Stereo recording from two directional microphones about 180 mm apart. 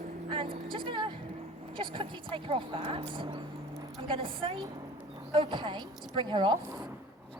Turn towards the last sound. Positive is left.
turn(degrees=-25)  # may be behind; listen again after turning